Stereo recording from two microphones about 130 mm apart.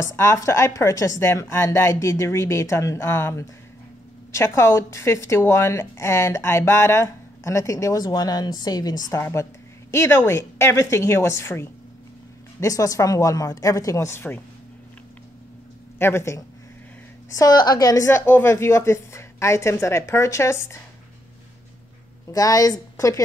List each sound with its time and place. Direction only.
0.0 s speech: 20° left (ahead or behind)
16.0 s speech: 20° left (ahead or behind)
22.3 s speech: 30° left (ahead or behind)